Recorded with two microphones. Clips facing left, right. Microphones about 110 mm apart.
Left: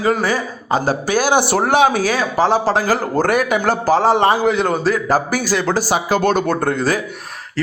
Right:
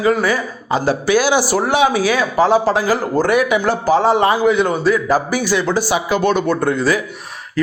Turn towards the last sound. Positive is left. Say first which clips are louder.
# right 1 dB
turn(degrees=45)  # may be behind; listen again after turning